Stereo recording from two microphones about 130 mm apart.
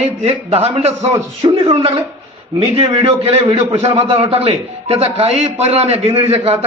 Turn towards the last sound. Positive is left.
turn(degrees=-50)  # may be behind; listen again after turning